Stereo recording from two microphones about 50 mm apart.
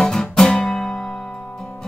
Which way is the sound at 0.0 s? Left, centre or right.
Centre.